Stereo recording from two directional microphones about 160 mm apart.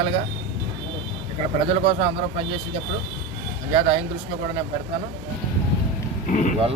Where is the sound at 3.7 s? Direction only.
35° right (ahead or behind).